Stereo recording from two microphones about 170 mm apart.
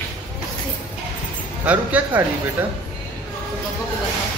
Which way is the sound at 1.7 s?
10° right (ahead or behind).